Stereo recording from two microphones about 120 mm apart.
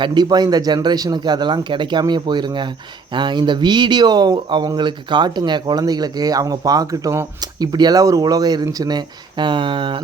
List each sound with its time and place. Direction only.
0.0 s speech: 40° right (ahead or behind)